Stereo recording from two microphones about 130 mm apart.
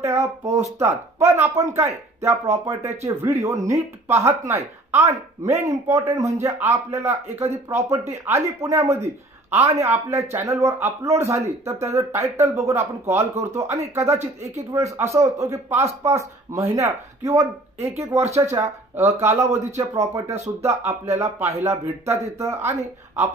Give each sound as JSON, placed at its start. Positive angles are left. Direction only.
{"t": 0.0, "sound": "speech", "side_deg": -20}